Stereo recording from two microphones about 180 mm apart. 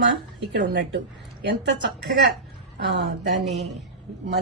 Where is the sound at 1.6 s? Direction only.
75° right (ahead or behind).